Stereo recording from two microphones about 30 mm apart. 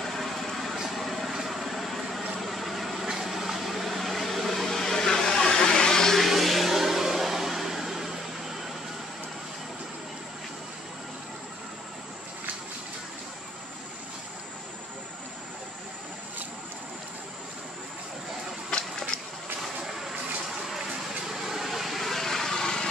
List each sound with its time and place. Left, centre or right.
0.0 s vehicle: centre
3.1 s a sound: centre; by 6.1 s left
6.1 s vehicle: centre
18.7 s a sound: left
21.3 s vehicle: centre
22.1 s vehicle: centre